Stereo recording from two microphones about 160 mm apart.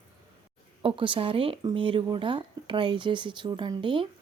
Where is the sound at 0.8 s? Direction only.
35° right (ahead or behind).